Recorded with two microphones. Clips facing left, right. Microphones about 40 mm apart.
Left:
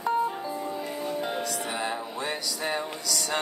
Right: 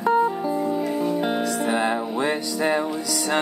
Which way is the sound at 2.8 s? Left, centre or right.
Centre.